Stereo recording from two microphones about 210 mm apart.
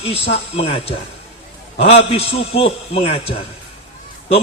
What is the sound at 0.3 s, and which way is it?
Speech, 30° left (ahead or behind).